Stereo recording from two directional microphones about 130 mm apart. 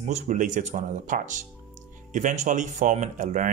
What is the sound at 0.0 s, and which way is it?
Speech, 65° right (ahead or behind).